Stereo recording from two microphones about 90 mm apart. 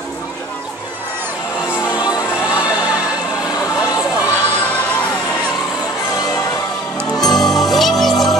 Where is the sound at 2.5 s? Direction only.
10° right (ahead or behind).